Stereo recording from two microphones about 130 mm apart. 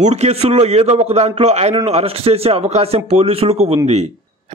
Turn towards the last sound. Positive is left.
turn(degrees=-55)  # may be behind; listen again after turning